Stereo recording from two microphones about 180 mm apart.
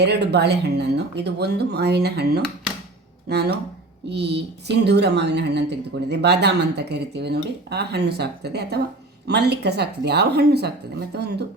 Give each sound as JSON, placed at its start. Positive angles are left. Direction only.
{"t": 0.0, "sound": "speech", "side_deg": -70}